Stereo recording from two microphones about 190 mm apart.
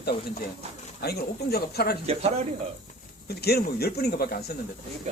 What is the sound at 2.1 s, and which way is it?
Speech, 35° right (ahead or behind).